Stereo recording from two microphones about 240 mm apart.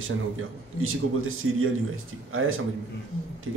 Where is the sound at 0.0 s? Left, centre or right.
Right.